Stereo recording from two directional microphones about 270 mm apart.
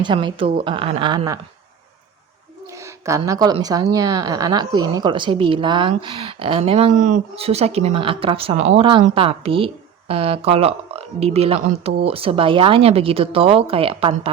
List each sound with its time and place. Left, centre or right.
0.0 s a woman's voice: centre
2.7 s a woman's voice: centre